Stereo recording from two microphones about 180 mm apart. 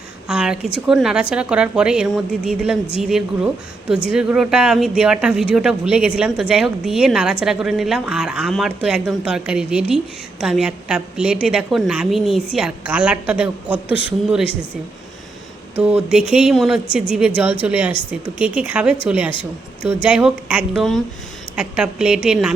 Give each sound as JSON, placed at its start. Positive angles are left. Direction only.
{"t": 0.3, "sound": "a woman's voice", "side_deg": -5}
{"t": 15.8, "sound": "a woman's voice", "side_deg": -10}
{"t": 19.3, "sound": "speech", "side_deg": 30}
{"t": 20.1, "sound": "speech", "side_deg": -5}